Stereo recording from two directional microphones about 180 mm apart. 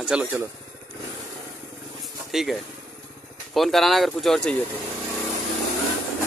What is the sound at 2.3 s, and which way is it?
Speech, centre (ahead or behind).